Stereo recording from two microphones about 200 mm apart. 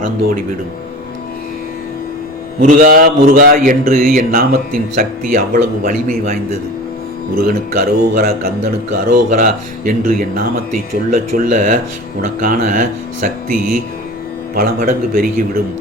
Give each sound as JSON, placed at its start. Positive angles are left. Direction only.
{"t": 2.6, "sound": "a man's voice", "side_deg": -40}
{"t": 7.3, "sound": "a man's voice", "side_deg": -45}